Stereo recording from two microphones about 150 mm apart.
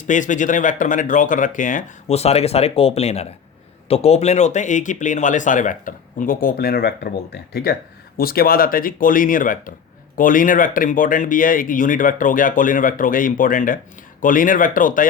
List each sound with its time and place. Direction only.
0.0 s speech: 55° left (ahead or behind)